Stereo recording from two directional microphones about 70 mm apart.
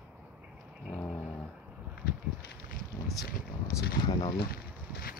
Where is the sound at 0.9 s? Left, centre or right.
Centre.